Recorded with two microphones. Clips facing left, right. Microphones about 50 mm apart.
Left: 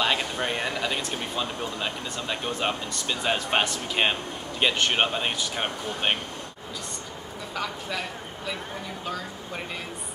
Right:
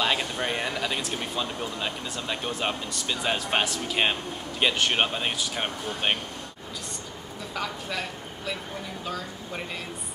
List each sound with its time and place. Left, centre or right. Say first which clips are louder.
0.0 s speech: left 1 dB; centre
7.5 s speech: even; centre